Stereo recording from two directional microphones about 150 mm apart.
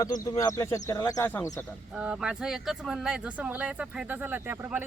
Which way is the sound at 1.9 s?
5° right (ahead or behind).